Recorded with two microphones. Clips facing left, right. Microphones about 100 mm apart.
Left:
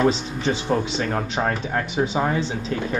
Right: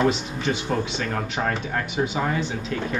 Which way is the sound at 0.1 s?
30° left (ahead or behind).